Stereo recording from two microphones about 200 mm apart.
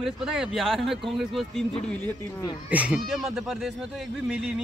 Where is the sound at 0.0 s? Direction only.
5° right (ahead or behind).